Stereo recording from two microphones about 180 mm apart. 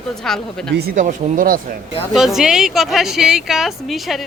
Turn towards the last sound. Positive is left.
turn(degrees=0)  # may be behind; listen again after turning